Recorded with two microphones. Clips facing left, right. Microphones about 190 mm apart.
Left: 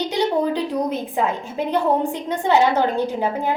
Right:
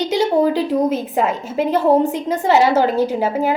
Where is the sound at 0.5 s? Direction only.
5° right (ahead or behind).